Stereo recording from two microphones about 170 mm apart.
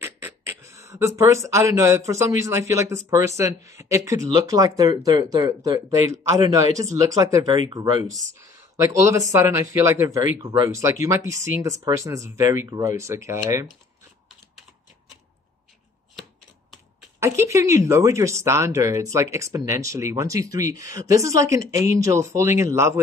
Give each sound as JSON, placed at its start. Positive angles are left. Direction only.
{"t": 0.0, "sound": "speech", "side_deg": -15}
{"t": 17.2, "sound": "speech", "side_deg": -15}